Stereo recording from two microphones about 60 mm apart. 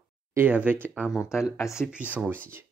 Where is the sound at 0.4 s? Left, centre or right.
Right.